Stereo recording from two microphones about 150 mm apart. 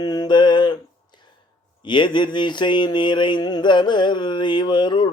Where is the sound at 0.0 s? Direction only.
30° left (ahead or behind).